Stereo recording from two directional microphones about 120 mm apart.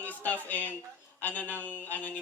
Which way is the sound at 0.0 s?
15° left (ahead or behind).